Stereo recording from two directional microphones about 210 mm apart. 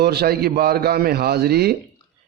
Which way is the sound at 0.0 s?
50° right (ahead or behind).